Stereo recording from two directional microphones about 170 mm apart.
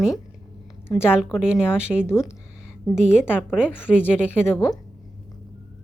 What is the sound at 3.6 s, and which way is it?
Speech, 10° left (ahead or behind).